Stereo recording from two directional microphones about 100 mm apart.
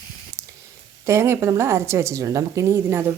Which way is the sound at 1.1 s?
25° right (ahead or behind).